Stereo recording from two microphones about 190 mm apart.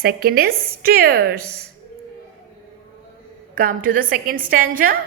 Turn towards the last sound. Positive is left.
turn(degrees=-50)  # may be behind; listen again after turning